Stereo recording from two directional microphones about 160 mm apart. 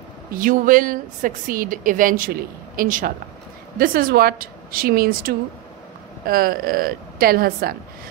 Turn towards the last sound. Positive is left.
turn(degrees=-70)  # may be behind; listen again after turning